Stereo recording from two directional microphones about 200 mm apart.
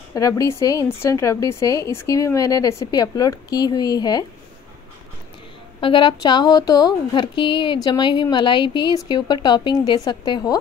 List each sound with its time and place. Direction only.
0.1 s a woman's voice: 15° left (ahead or behind)
5.8 s speech: 25° left (ahead or behind)